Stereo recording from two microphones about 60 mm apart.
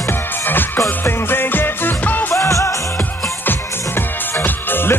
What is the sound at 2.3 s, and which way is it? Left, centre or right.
Music, left.